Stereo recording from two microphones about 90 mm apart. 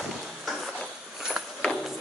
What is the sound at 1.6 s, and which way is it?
Music, centre (ahead or behind).